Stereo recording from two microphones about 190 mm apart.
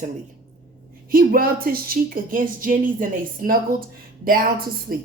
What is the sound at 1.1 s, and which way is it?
Speech, 50° right (ahead or behind).